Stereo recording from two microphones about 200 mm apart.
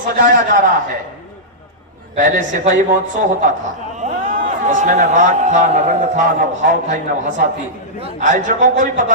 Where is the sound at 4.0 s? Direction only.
40° right (ahead or behind).